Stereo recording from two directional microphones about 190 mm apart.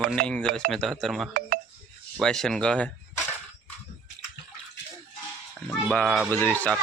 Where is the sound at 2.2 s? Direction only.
Centre (ahead or behind).